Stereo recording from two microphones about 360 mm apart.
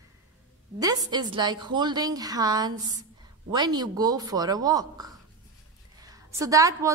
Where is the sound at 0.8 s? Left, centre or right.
Centre.